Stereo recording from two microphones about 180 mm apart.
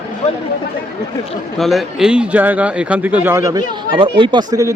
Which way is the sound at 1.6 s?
Centre (ahead or behind).